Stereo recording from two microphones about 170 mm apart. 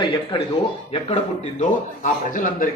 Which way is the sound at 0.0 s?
25° left (ahead or behind).